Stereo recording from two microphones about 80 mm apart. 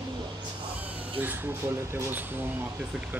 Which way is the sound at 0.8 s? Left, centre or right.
Right.